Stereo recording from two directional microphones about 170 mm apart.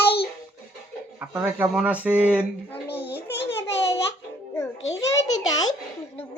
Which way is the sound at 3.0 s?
75° left (ahead or behind).